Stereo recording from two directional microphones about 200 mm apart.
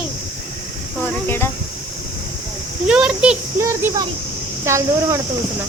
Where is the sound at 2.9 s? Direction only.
5° right (ahead or behind).